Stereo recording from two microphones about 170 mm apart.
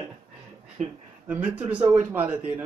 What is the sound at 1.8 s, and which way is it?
Speech, 40° right (ahead or behind).